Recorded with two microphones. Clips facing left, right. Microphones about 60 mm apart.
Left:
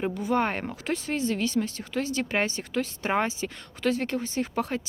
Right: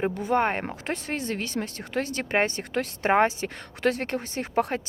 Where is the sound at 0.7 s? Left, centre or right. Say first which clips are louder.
Left 1 dB; right.